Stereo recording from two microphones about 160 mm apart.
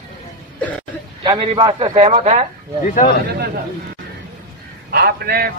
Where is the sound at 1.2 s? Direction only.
30° right (ahead or behind).